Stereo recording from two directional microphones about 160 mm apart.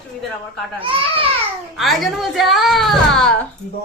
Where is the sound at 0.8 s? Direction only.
35° right (ahead or behind).